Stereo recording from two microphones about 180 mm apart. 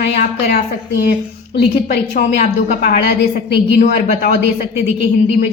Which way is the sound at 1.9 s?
55° left (ahead or behind).